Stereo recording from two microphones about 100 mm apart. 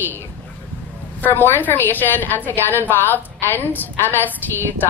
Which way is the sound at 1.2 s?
20° left (ahead or behind).